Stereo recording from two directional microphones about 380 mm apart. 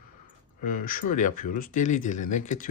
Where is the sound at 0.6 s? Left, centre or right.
Left.